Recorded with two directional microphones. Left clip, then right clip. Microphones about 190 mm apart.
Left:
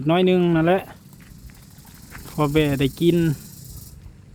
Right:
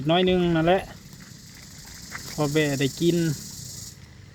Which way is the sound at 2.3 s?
20° left (ahead or behind).